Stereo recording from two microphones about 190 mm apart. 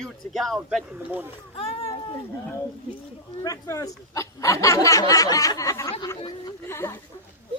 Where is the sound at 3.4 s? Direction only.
20° left (ahead or behind).